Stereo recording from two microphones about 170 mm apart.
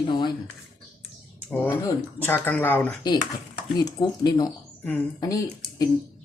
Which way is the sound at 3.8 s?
25° left (ahead or behind).